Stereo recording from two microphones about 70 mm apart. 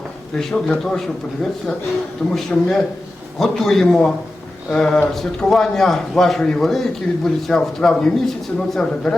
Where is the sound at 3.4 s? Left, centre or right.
Centre.